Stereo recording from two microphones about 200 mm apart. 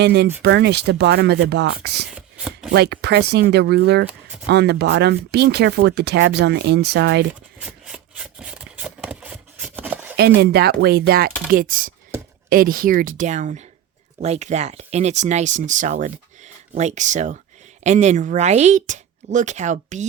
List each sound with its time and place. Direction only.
0.0 s speech: 55° right (ahead or behind)
2.1 s chopping: 5° right (ahead or behind)
2.7 s speech: 55° right (ahead or behind)
7.6 s rub: 5° right (ahead or behind)
9.7 s a sound: 10° right (ahead or behind)
10.2 s speech: 55° right (ahead or behind); by 20.1 s 35° right (ahead or behind)